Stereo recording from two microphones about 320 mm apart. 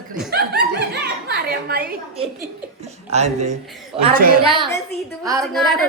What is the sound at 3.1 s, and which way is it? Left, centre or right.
A woman's voice, right.